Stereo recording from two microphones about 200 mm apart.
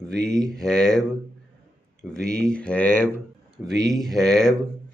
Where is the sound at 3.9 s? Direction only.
Centre (ahead or behind).